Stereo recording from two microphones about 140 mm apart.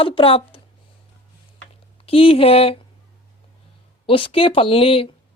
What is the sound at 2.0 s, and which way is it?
Speech, 40° left (ahead or behind).